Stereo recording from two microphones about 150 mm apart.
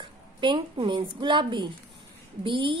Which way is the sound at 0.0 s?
35° right (ahead or behind).